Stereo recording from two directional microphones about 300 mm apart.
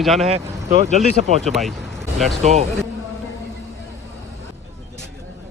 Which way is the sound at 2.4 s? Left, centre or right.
Right.